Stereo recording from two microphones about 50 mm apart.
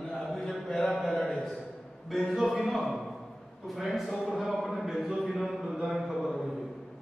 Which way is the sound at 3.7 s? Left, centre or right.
Centre.